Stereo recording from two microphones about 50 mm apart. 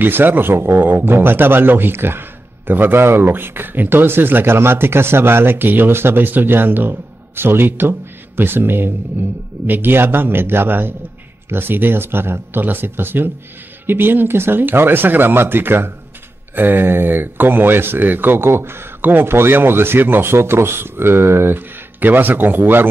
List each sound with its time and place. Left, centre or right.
0.0 s a man's voice: right